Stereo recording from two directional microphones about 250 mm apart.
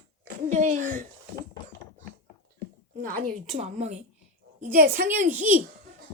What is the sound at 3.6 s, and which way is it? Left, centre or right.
A woman's voice, right.